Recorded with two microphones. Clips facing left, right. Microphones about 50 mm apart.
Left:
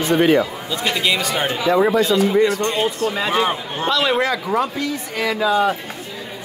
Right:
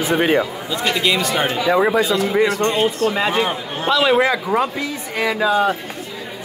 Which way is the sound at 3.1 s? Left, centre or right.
Centre.